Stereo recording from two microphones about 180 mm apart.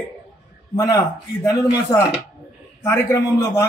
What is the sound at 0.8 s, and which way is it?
A man's voice, 20° left (ahead or behind).